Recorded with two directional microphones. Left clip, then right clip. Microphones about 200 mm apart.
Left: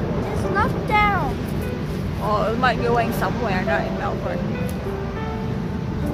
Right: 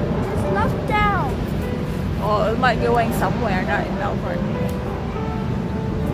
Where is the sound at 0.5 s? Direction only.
30° left (ahead or behind).